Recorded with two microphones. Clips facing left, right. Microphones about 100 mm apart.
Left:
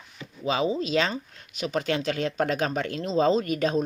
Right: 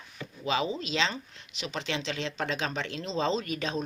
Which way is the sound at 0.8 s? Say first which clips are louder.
Left 5 dB; 45° left (ahead or behind).